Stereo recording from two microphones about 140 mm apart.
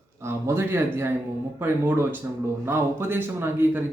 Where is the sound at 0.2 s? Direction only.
20° right (ahead or behind).